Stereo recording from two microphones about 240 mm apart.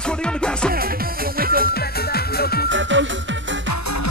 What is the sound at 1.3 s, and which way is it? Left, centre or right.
Music, right.